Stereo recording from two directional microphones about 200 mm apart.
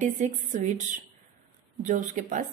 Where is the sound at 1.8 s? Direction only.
40° right (ahead or behind).